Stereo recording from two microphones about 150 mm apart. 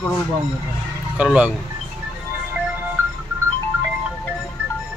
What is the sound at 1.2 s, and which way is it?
Speech, 10° right (ahead or behind).